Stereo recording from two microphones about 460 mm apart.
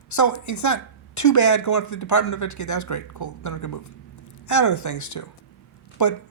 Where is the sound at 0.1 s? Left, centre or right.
Left.